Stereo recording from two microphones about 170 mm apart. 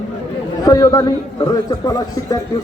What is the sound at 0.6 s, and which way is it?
A man's voice, 20° left (ahead or behind).